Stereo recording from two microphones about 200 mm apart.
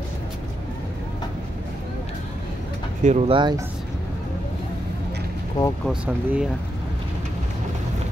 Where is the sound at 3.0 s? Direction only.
30° right (ahead or behind).